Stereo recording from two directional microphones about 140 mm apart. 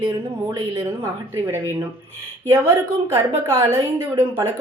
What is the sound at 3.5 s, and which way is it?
Speech, 20° right (ahead or behind).